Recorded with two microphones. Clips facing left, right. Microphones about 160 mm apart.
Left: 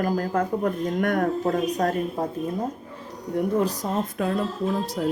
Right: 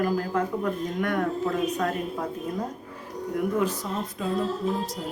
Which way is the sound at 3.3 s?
35° left (ahead or behind).